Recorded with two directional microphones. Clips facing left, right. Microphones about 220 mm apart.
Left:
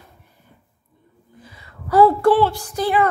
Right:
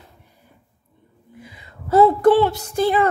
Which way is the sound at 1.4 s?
15° right (ahead or behind).